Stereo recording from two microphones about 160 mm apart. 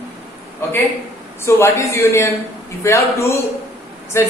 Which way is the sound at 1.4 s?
15° left (ahead or behind).